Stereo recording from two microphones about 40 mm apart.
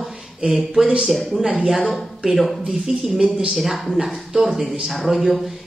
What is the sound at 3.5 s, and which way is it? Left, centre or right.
Speech, centre.